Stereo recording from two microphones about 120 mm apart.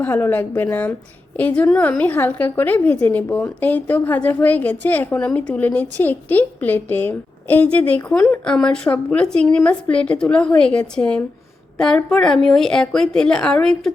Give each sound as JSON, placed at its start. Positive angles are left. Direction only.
{"t": 0.0, "sound": "a woman's voice", "side_deg": 20}